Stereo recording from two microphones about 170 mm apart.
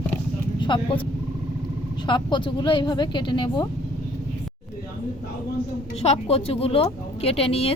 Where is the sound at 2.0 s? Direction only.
30° left (ahead or behind).